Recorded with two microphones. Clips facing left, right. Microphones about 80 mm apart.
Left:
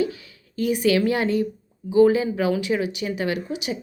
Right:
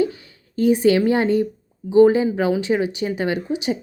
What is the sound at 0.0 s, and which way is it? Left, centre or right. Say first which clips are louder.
A woman's voice: right 3 dB; right.